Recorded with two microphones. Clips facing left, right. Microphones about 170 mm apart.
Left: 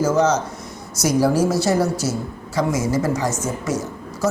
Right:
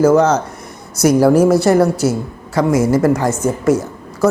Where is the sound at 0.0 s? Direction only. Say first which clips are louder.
Right 6 dB; 60° right (ahead or behind).